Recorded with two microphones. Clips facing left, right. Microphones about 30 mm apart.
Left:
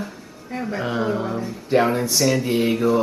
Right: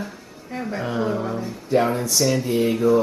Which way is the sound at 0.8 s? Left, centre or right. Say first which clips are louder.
Even; left.